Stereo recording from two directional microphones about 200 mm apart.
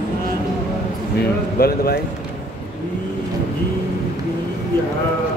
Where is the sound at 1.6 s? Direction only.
50° left (ahead or behind).